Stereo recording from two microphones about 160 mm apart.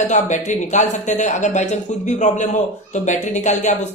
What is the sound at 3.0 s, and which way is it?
Speech, 45° left (ahead or behind).